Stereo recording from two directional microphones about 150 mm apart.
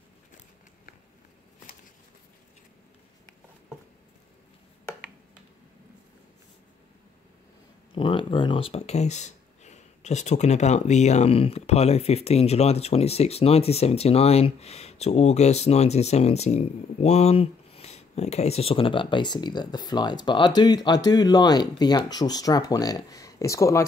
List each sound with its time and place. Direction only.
7.9 s speech: 35° left (ahead or behind)